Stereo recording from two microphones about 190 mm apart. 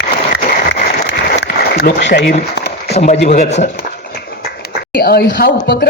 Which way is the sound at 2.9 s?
35° left (ahead or behind).